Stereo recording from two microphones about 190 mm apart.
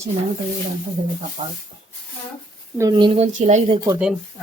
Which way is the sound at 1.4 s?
30° right (ahead or behind).